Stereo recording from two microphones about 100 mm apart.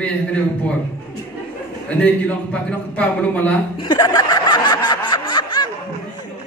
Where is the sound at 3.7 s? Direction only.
45° left (ahead or behind).